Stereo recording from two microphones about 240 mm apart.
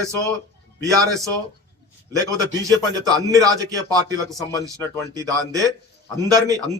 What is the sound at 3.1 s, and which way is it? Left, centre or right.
A man's voice, centre.